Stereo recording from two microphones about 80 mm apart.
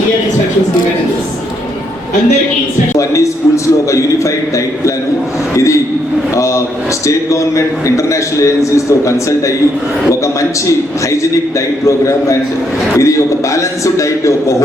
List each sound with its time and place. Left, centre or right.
3.0 s a man's voice: left
11.9 s a man's voice: left